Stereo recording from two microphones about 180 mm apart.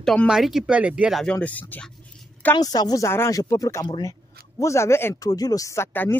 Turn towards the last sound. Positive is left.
turn(degrees=15)  # may be behind; listen again after turning